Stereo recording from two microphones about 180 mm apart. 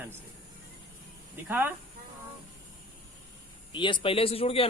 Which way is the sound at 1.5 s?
10° right (ahead or behind).